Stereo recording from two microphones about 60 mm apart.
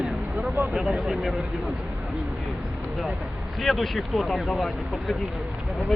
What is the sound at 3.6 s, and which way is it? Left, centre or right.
Speech, centre.